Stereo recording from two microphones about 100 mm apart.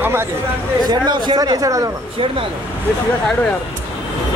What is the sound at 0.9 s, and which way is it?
Speech, 50° right (ahead or behind).